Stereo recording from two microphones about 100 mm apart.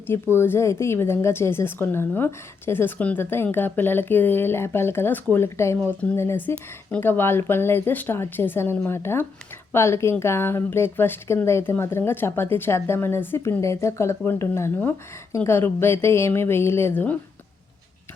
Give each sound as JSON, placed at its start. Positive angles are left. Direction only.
{"t": 0.1, "sound": "speech", "side_deg": 25}